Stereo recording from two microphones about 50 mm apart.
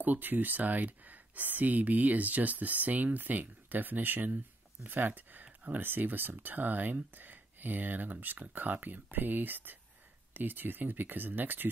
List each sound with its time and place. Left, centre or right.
0.0 s speech: right